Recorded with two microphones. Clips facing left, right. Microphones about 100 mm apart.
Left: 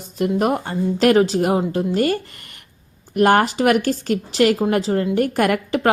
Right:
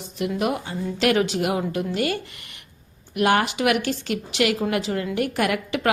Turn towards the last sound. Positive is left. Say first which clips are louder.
# left 5 dB
turn(degrees=40)  # may be behind; listen again after turning